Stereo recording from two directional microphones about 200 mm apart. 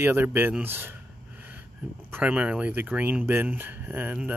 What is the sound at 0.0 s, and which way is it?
Speech, 10° right (ahead or behind).